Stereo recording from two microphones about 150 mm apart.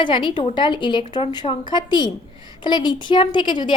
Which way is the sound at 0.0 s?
30° left (ahead or behind).